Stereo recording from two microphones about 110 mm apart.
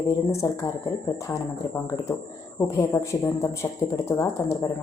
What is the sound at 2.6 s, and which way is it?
Speech, 25° left (ahead or behind).